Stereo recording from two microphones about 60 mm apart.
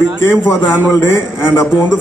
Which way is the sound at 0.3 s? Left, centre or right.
Left.